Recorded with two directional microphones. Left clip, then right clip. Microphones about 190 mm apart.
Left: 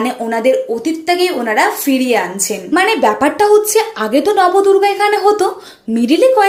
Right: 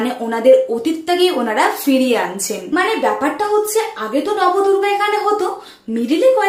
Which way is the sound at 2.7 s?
30° left (ahead or behind).